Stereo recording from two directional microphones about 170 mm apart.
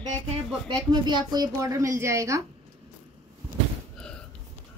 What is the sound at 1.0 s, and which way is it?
A woman's voice, 25° right (ahead or behind).